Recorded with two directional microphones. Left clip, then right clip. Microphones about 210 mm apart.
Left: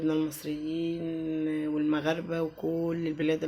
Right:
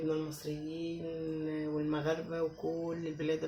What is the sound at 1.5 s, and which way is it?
Mantra, 45° left (ahead or behind).